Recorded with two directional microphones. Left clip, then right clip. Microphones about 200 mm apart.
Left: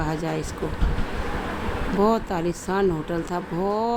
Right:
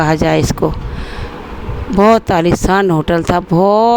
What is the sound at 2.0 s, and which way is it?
Speech, 45° right (ahead or behind).